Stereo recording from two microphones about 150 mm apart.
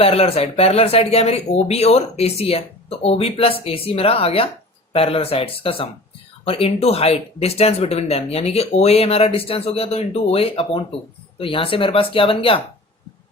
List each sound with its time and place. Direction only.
0.0 s speech: 40° left (ahead or behind)